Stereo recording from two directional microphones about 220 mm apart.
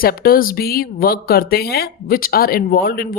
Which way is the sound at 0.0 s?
45° left (ahead or behind).